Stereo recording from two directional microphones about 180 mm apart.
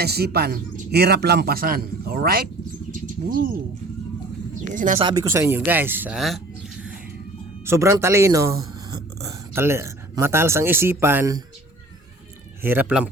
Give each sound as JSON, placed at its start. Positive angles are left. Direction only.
{"t": 0.0, "sound": "a man's voice", "side_deg": -60}
{"t": 2.9, "sound": "bird", "side_deg": -50}
{"t": 4.7, "sound": "speech", "side_deg": -45}
{"t": 4.9, "sound": "speech", "side_deg": -25}
{"t": 7.6, "sound": "speech", "side_deg": -15}
{"t": 12.6, "sound": "speech", "side_deg": -10}